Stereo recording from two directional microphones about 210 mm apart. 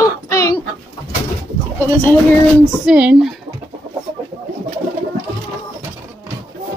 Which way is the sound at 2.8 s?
5° right (ahead or behind).